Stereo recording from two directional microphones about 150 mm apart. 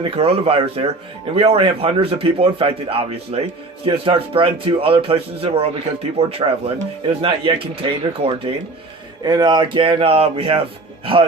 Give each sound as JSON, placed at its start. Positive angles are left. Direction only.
{"t": 0.0, "sound": "a man's voice", "side_deg": -40}
{"t": 9.2, "sound": "a man's voice", "side_deg": -30}